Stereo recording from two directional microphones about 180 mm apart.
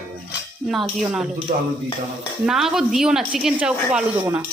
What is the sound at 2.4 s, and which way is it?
A woman's voice, centre (ahead or behind).